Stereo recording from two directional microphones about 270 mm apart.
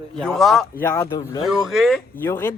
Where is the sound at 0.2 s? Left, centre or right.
Centre.